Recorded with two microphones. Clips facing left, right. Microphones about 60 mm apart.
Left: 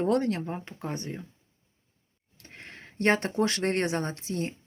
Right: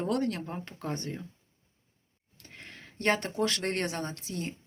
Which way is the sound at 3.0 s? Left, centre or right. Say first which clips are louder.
Left 3 dB; left.